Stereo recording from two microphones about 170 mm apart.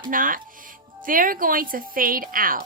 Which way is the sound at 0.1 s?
55° right (ahead or behind).